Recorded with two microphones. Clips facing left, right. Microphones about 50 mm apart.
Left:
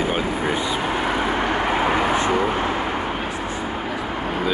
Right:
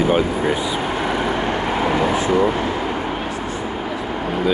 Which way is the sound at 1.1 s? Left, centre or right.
Centre.